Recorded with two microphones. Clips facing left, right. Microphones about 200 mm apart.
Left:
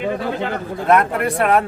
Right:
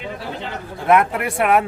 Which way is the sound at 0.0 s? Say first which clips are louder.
Left 7 dB; 60° left (ahead or behind).